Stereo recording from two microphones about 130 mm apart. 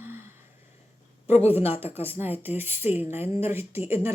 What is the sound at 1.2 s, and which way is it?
Speech, 55° left (ahead or behind).